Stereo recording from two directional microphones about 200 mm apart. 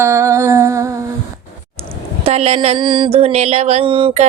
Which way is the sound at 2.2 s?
30° right (ahead or behind).